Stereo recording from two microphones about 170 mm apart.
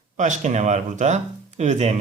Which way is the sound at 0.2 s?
45° right (ahead or behind).